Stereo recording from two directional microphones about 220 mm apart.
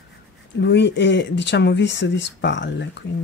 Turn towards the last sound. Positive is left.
turn(degrees=55)  # may be behind; listen again after turning